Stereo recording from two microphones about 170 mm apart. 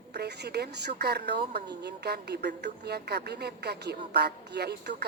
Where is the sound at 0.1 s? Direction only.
75° right (ahead or behind).